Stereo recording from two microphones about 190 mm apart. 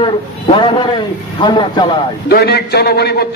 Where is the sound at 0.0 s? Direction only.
25° left (ahead or behind).